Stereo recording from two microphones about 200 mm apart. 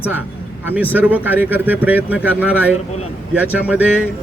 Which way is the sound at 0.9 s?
10° right (ahead or behind).